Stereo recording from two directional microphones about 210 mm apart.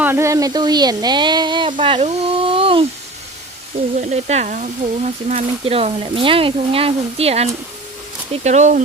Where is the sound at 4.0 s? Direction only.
35° right (ahead or behind).